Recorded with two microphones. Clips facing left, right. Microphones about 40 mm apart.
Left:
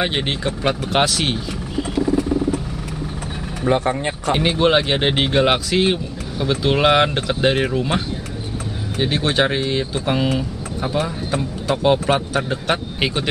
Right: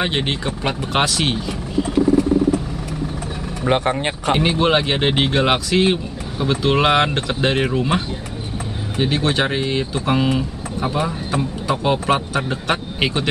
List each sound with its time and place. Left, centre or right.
0.0 s speech: centre
3.6 s speech: right
4.4 s speech: centre